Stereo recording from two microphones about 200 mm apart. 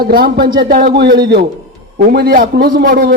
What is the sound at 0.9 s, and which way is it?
A man's voice, 55° right (ahead or behind).